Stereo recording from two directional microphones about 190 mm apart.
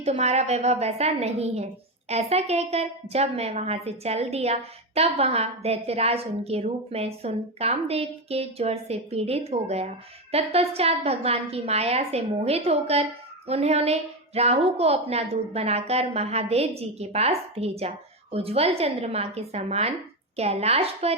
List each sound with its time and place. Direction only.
0.0 s a woman's voice: 35° right (ahead or behind)